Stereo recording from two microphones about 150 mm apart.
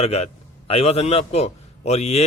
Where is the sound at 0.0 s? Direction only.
45° left (ahead or behind).